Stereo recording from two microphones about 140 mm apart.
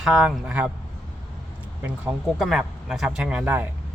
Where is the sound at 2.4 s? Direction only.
5° right (ahead or behind).